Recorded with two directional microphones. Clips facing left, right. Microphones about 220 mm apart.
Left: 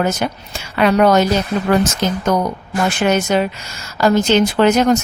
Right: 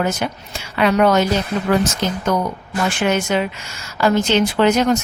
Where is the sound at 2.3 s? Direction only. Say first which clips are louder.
Left 2 dB; 40° left (ahead or behind).